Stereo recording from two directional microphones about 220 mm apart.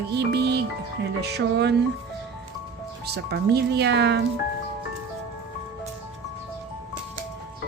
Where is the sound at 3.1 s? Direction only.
50° right (ahead or behind).